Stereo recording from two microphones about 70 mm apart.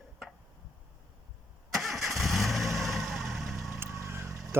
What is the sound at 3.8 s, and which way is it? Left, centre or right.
Vehicle, right.